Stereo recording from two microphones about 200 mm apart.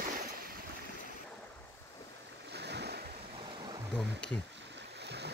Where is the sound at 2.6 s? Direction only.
55° right (ahead or behind).